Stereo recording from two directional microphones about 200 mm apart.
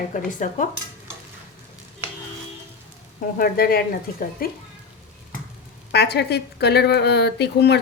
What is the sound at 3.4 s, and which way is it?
Speech, 50° left (ahead or behind).